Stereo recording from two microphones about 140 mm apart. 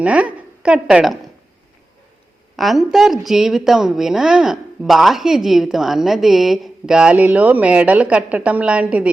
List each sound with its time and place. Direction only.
0.0 s a woman's voice: 10° right (ahead or behind)
2.6 s a woman's voice: centre (ahead or behind)